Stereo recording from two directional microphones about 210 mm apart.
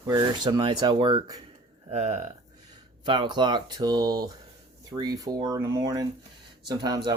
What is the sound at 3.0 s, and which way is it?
Speech, 20° right (ahead or behind).